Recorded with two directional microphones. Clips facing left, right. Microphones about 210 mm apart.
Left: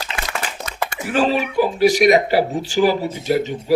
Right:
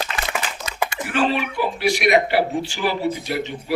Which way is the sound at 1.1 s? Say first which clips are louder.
Left 5 dB; 40° left (ahead or behind).